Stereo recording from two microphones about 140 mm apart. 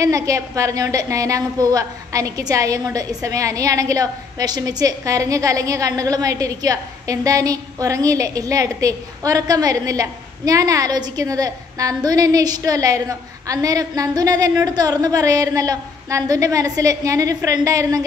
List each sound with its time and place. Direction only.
0.0 s a woman's voice: 25° right (ahead or behind)